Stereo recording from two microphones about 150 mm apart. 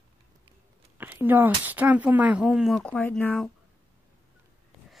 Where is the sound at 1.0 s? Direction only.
15° right (ahead or behind); by 3.5 s 5° left (ahead or behind).